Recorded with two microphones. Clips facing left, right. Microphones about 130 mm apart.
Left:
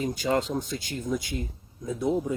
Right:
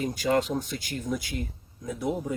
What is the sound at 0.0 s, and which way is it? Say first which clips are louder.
Speech: right 1 dB; 25° left (ahead or behind).